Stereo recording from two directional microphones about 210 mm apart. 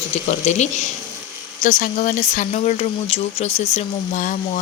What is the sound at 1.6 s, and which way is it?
A woman's voice, 35° left (ahead or behind).